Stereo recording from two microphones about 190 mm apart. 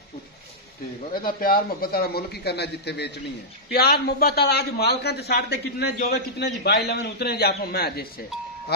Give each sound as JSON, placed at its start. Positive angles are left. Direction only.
{"t": 1.1, "sound": "a man's voice", "side_deg": 50}